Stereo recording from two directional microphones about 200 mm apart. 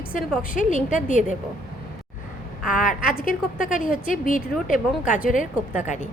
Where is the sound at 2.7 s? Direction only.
40° left (ahead or behind).